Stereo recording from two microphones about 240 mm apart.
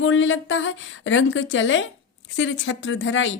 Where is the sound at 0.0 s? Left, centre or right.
Left.